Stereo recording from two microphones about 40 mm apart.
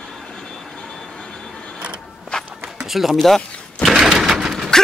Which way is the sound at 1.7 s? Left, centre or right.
Right.